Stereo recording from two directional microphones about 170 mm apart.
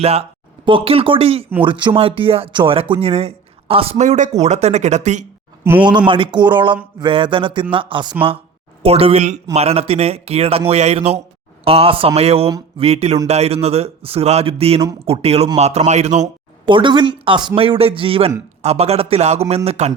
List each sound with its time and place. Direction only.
0.0 s speech: 35° right (ahead or behind)
5.6 s a man's voice: 15° right (ahead or behind)
6.1 s speech: 30° right (ahead or behind)
16.2 s speech: 30° right (ahead or behind)